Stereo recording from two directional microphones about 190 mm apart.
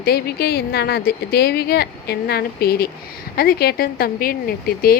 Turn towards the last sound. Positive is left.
turn(degrees=50)  # may be behind; listen again after turning